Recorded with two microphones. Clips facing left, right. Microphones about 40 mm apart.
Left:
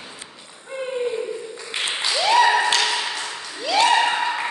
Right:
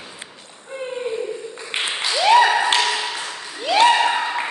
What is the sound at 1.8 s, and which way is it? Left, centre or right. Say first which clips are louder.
Applause: right 1 dB; centre.